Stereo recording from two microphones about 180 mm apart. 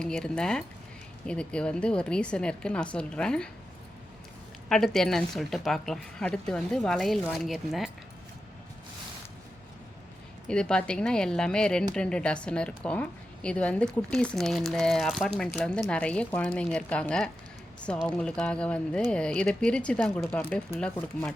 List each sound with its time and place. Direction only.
0.0 s a woman's voice: 5° left (ahead or behind)
4.7 s a woman's voice: centre (ahead or behind)
10.5 s a woman's voice: 5° left (ahead or behind)